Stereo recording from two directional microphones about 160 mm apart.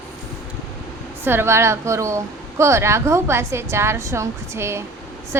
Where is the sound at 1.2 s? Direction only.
15° right (ahead or behind).